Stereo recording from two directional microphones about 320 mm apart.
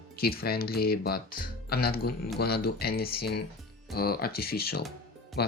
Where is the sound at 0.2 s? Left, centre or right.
Left.